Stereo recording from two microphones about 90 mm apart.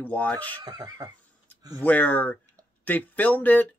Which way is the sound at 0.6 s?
45° right (ahead or behind).